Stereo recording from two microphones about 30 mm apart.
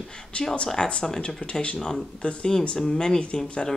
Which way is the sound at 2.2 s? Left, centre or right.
Left.